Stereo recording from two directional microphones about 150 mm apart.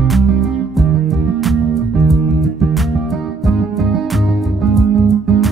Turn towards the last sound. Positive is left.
turn(degrees=0)  # may be behind; listen again after turning